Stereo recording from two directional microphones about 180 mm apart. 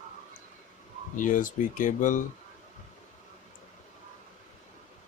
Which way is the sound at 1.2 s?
45° left (ahead or behind).